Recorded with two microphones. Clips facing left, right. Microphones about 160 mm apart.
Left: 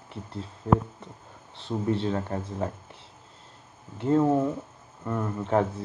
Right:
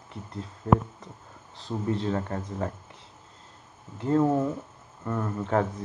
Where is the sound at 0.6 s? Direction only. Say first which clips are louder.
Even; 10° left (ahead or behind).